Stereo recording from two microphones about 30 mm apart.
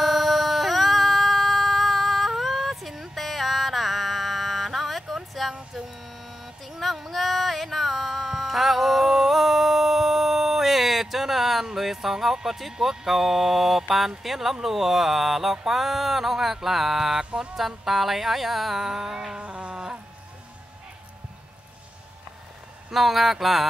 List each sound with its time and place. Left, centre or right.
0.0 s emergency vehicle: centre
3.2 s mantra: centre
5.8 s a sound: centre
12.4 s speech: centre
19.3 s a sound: right
19.7 s music: right
22.8 s speech: centre